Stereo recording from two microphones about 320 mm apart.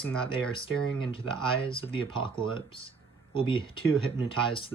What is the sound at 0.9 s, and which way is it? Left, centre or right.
Speech, centre.